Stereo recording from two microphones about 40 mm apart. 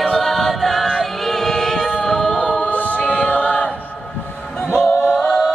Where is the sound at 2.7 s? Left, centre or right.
Left.